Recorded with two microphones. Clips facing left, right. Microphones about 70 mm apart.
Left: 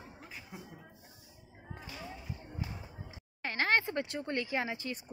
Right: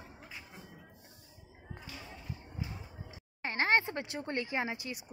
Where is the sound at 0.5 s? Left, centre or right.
Centre.